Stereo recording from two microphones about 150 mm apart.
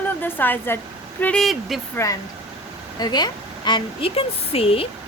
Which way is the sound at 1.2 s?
5° left (ahead or behind).